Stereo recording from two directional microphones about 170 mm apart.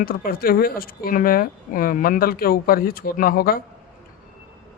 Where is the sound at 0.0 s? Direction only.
60° left (ahead or behind).